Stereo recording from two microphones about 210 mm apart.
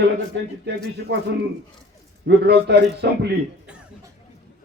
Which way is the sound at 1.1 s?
50° right (ahead or behind).